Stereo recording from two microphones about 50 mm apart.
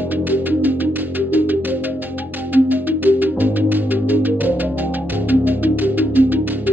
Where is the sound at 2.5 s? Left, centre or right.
Right.